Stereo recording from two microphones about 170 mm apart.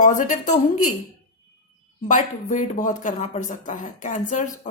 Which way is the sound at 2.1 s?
45° left (ahead or behind).